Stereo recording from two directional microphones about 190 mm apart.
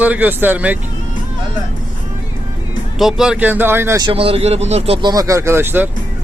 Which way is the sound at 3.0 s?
Centre (ahead or behind).